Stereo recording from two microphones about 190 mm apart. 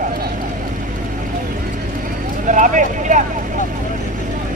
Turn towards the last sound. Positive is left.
turn(degrees=-40)  # may be behind; listen again after turning